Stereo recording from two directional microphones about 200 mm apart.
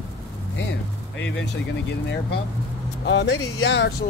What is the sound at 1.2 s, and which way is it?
Speech, 65° left (ahead or behind).